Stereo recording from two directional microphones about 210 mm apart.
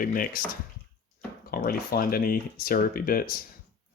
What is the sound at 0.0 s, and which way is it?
Speech, 40° left (ahead or behind).